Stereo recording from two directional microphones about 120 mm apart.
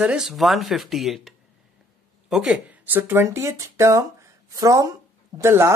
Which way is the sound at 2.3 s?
5° right (ahead or behind).